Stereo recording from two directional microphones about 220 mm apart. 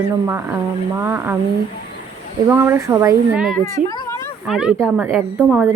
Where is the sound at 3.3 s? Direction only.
Centre (ahead or behind).